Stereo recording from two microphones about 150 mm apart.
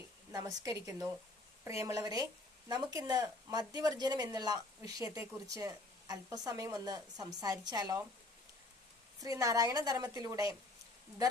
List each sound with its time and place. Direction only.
0.3 s a woman's voice: 25° right (ahead or behind)
9.2 s a woman's voice: 20° right (ahead or behind)